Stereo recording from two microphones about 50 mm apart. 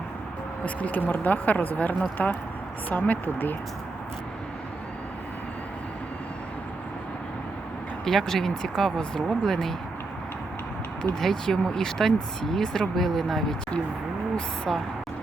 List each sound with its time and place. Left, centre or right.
0.6 s speech: left
8.0 s speech: centre
11.2 s speech: centre
14.3 s speech: centre